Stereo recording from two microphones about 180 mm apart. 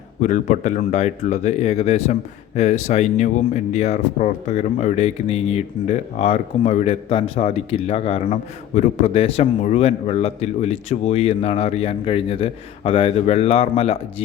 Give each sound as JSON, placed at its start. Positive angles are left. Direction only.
{"t": 0.2, "sound": "speech", "side_deg": 40}